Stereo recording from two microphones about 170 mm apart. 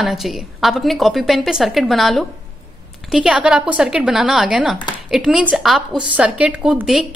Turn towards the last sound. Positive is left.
turn(degrees=-5)  # may be behind; listen again after turning